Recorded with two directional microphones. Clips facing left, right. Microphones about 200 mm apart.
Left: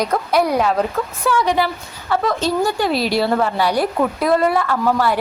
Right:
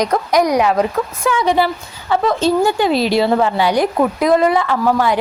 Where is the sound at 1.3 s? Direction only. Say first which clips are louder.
Right 2 dB; 25° right (ahead or behind).